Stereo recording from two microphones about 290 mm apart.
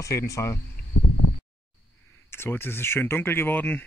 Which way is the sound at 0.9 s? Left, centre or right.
Left.